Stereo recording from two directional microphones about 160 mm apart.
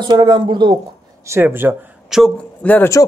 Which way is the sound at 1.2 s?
15° right (ahead or behind).